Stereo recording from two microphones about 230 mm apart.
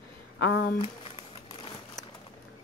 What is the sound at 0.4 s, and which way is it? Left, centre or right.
Speech, left.